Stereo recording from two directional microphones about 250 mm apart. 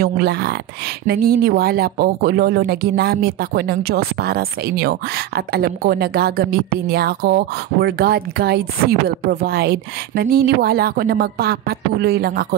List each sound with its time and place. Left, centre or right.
0.0 s speech: right